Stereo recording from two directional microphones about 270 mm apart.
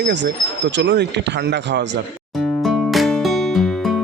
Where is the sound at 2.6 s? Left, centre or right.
Centre.